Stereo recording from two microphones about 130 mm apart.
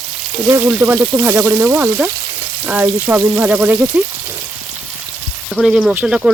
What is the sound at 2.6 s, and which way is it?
Speech, 15° right (ahead or behind).